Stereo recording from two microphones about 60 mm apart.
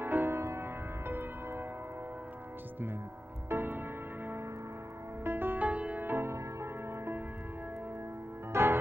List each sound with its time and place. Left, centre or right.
0.0 s music: right
3.4 s music: right
5.7 s music: right
6.0 s music: right
8.5 s music: right